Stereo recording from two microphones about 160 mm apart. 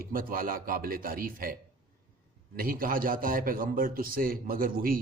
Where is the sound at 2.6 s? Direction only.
65° right (ahead or behind).